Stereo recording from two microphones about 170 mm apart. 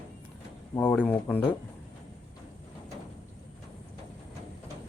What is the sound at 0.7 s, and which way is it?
Speech, 10° left (ahead or behind).